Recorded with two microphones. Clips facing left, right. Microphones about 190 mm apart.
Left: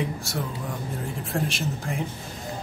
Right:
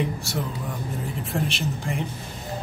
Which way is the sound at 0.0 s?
Centre (ahead or behind).